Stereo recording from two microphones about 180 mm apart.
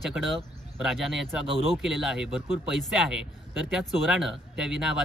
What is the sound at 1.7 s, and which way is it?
Speech, centre (ahead or behind).